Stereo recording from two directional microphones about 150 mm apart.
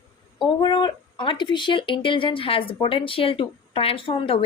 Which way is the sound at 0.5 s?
30° left (ahead or behind).